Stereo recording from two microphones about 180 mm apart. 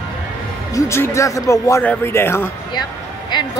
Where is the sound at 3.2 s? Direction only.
25° left (ahead or behind).